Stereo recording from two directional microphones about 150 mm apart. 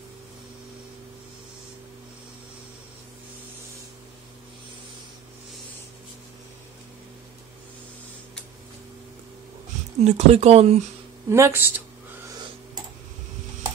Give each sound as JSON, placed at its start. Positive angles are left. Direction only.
{"t": 10.0, "sound": "speech", "side_deg": -45}
{"t": 11.2, "sound": "speech", "side_deg": -20}